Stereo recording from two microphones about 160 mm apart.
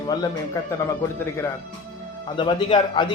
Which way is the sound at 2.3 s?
30° left (ahead or behind).